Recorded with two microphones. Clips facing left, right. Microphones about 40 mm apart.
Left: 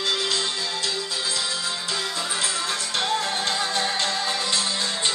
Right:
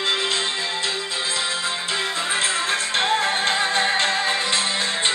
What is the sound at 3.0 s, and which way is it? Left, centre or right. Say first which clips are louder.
Music: right 4 dB; right.